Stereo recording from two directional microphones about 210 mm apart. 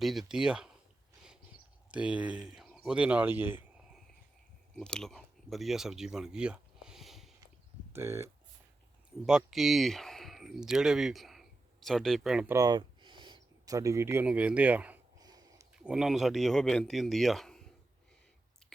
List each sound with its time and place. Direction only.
0.0 s speech: centre (ahead or behind)
1.9 s speech: 5° right (ahead or behind)
4.7 s speech: 5° left (ahead or behind)
7.9 s speech: 15° right (ahead or behind)
9.2 s speech: centre (ahead or behind)
12.5 s speech: 20° right (ahead or behind)
15.2 s a sound: 20° right (ahead or behind)
15.8 s speech: 5° right (ahead or behind)